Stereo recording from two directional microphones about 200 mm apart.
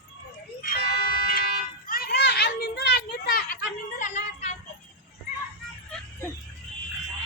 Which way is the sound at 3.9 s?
35° left (ahead or behind).